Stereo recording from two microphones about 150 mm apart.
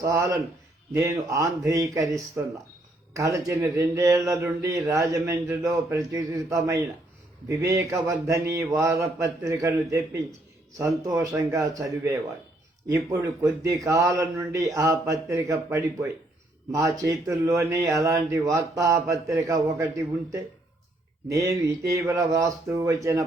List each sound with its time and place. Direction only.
0.0 s speech: 20° right (ahead or behind)
10.8 s speech: 25° right (ahead or behind)
21.2 s speech: 20° right (ahead or behind)